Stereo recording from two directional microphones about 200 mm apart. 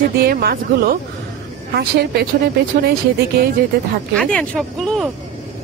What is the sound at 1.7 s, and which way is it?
Speech, 55° right (ahead or behind).